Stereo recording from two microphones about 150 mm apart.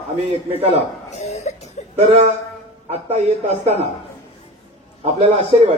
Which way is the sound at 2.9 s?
40° right (ahead or behind).